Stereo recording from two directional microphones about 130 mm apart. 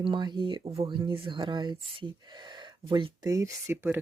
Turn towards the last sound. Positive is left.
turn(degrees=-15)  # may be behind; listen again after turning